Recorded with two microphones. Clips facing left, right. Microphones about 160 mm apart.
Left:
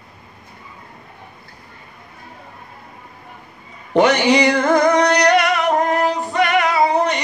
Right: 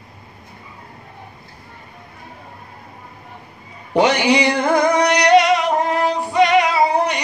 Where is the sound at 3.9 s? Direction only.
10° right (ahead or behind).